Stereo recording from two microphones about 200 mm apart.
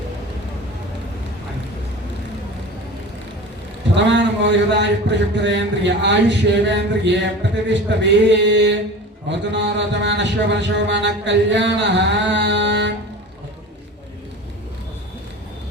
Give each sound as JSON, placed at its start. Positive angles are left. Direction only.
{"t": 3.9, "sound": "speech", "side_deg": -60}